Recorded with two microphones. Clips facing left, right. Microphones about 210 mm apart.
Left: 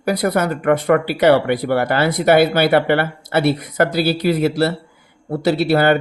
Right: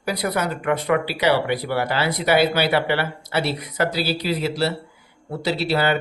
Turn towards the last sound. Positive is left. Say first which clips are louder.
# left 6 dB
turn(degrees=50)  # may be behind; listen again after turning